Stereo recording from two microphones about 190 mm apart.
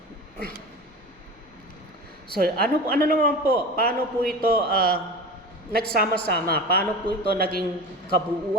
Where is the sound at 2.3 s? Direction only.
50° right (ahead or behind).